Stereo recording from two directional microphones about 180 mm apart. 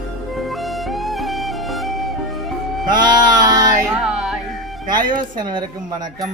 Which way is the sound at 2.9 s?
25° right (ahead or behind).